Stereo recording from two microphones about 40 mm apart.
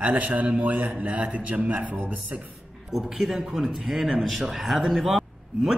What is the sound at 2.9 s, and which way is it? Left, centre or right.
A man's voice, centre.